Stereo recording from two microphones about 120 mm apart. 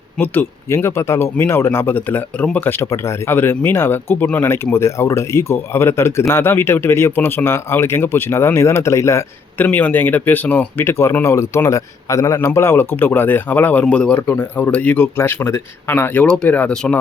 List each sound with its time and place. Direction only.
0.2 s speech: 15° left (ahead or behind)
9.6 s speech: 15° left (ahead or behind)